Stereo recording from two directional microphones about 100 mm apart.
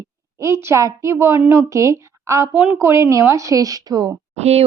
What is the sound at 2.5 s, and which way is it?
Speech, 10° right (ahead or behind).